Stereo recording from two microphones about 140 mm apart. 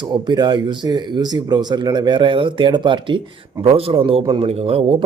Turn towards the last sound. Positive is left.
turn(degrees=-40)  # may be behind; listen again after turning